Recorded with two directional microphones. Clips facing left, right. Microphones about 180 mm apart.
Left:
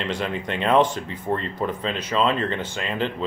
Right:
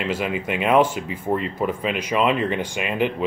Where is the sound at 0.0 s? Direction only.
10° right (ahead or behind).